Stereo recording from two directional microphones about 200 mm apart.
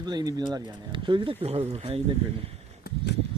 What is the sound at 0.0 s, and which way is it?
Speech, 20° right (ahead or behind).